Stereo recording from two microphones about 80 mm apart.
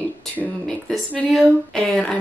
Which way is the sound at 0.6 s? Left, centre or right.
Centre.